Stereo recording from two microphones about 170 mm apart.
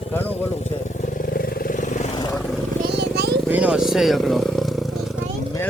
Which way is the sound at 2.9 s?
75° right (ahead or behind).